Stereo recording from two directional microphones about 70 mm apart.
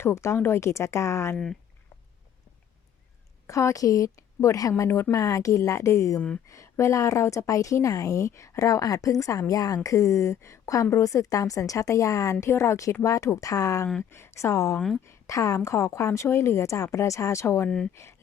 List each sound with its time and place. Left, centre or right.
0.0 s speech: left
3.4 s a woman's voice: left
6.1 s speech: centre
6.5 s a woman's voice: left
14.1 s a woman's voice: left
14.8 s speech: centre
15.0 s a woman's voice: left
17.7 s speech: centre